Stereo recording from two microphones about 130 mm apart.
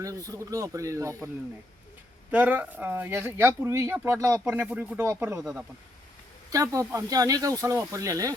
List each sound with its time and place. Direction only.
0.0 s speech: 25° right (ahead or behind)
2.3 s speech: 15° right (ahead or behind)
4.6 s speech: 5° right (ahead or behind)
5.4 s speech: 5° right (ahead or behind)
6.5 s speech: 25° right (ahead or behind)